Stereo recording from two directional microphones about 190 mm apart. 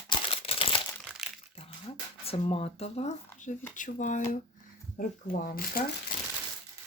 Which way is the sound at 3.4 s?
40° left (ahead or behind).